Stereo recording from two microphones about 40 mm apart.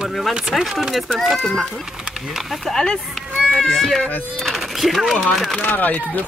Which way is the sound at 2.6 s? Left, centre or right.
Centre.